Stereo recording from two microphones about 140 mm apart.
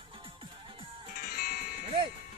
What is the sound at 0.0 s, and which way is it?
Music, 40° right (ahead or behind).